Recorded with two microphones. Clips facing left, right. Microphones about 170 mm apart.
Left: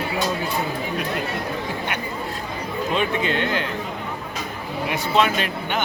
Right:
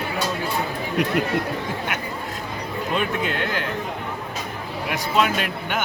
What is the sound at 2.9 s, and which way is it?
Speech, 5° right (ahead or behind).